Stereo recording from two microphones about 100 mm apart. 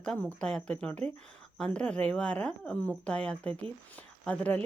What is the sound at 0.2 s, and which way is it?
Speech, 10° left (ahead or behind).